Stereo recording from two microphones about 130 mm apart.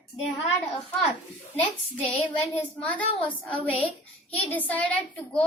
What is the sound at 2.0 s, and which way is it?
A child's voice, 10° left (ahead or behind).